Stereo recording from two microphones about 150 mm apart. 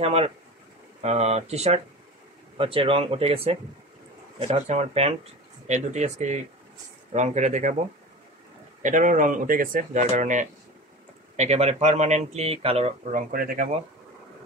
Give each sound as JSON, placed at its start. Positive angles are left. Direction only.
{"t": 0.0, "sound": "speech", "side_deg": -40}
{"t": 8.8, "sound": "speech", "side_deg": -60}
{"t": 13.1, "sound": "speech", "side_deg": -75}